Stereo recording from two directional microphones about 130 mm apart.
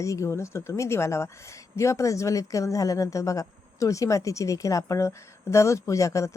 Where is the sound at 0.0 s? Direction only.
25° left (ahead or behind).